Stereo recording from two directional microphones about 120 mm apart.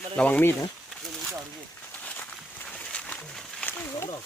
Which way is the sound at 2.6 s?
10° left (ahead or behind).